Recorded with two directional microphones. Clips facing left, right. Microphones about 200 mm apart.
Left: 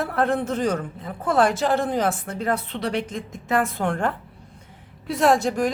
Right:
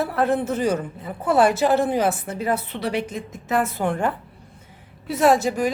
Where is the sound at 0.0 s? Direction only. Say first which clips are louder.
Right 1 dB; 5° right (ahead or behind).